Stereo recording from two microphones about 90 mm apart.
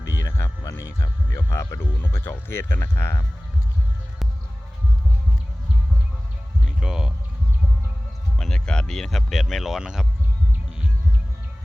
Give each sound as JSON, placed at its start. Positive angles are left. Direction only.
{"t": 0.0, "sound": "speech", "side_deg": 35}
{"t": 6.7, "sound": "music", "side_deg": -5}
{"t": 8.4, "sound": "speech", "side_deg": 10}